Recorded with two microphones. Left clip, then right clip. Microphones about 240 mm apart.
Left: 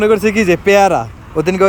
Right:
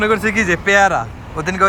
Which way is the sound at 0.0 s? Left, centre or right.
Left.